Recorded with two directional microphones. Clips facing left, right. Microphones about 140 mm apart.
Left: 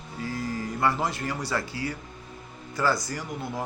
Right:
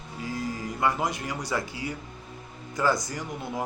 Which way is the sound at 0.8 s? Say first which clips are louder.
Even; 15° right (ahead or behind).